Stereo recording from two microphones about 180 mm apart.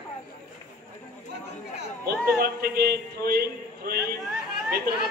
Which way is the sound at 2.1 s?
60° right (ahead or behind).